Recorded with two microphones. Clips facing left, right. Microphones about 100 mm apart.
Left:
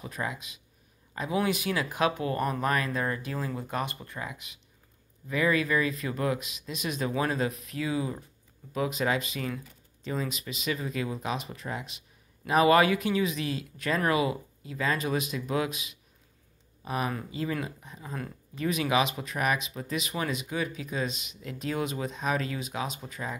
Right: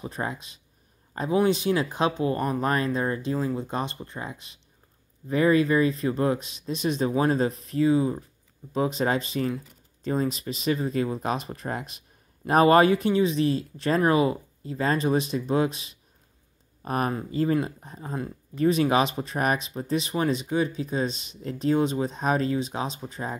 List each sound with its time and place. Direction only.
0.0 s speech: 35° right (ahead or behind)
16.8 s speech: 50° right (ahead or behind); by 23.3 s 30° right (ahead or behind)